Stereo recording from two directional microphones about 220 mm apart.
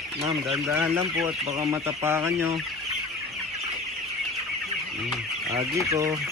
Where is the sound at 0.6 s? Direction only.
10° right (ahead or behind).